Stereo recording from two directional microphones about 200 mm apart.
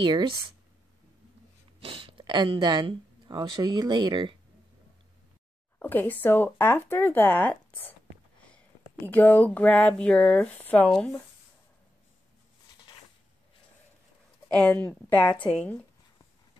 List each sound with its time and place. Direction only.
0.0 s speech: 25° right (ahead or behind)
1.8 s speech: 25° right (ahead or behind)
5.8 s speech: 10° left (ahead or behind)
9.0 s speech: 10° left (ahead or behind)
14.5 s a woman's voice: 5° left (ahead or behind)